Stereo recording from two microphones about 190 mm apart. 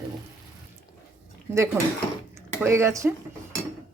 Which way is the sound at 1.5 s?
15° right (ahead or behind).